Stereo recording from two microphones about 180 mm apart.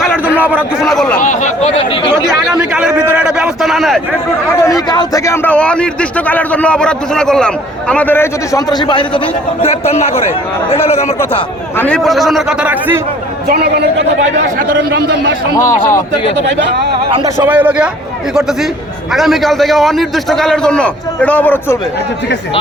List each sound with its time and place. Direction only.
0.0 s a sound: 10° right (ahead or behind)
0.9 s a sound: 5° left (ahead or behind)
1.2 s chatter: 45° left (ahead or behind)
2.2 s a sound: 5° right (ahead or behind)
4.9 s a man's voice: 20° left (ahead or behind)
11.8 s a man's voice: 5° left (ahead or behind)
13.5 s a man's voice: 65° right (ahead or behind)
15.5 s a man's voice: 15° left (ahead or behind)
17.4 s a man's voice: 10° right (ahead or behind); by 21.8 s 10° left (ahead or behind)